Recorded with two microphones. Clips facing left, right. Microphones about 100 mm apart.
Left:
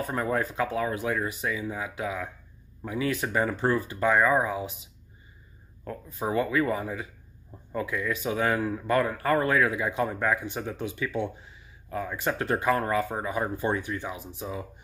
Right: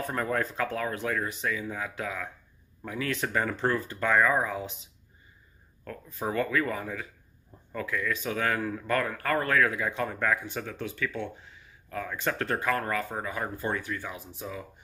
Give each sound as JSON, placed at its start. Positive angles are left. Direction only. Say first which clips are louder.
{"t": 0.0, "sound": "speech", "louder": "left 2 dB", "side_deg": 10}
{"t": 5.9, "sound": "speech", "louder": "left 2 dB", "side_deg": 15}